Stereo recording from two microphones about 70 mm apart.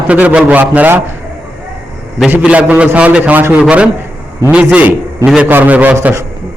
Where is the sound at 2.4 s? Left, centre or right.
Centre.